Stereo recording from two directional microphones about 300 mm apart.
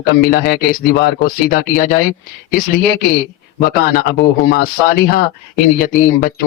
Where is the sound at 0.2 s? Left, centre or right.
Left.